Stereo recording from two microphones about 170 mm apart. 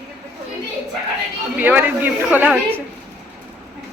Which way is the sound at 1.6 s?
10° right (ahead or behind).